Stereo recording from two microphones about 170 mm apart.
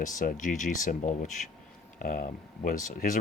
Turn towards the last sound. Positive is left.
turn(degrees=50)  # may be behind; listen again after turning